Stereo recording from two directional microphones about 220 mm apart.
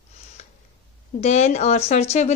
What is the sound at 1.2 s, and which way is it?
Speech, 30° left (ahead or behind).